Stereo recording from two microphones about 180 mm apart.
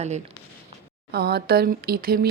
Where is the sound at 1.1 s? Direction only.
60° right (ahead or behind).